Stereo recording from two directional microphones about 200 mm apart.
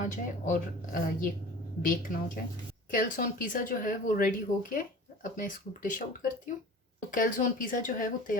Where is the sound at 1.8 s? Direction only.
45° left (ahead or behind).